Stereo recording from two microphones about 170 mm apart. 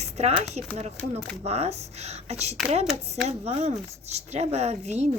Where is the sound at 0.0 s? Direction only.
40° right (ahead or behind).